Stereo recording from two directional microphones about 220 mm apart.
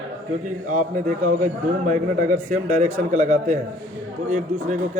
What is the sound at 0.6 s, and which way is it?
A man's voice, 35° right (ahead or behind).